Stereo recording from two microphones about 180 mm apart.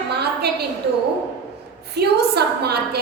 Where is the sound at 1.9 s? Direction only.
65° right (ahead or behind).